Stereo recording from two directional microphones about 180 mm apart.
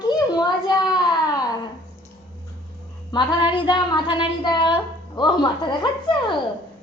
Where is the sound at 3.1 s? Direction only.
25° left (ahead or behind).